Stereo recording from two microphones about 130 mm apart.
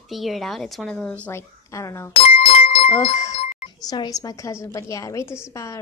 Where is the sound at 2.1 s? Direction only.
50° left (ahead or behind).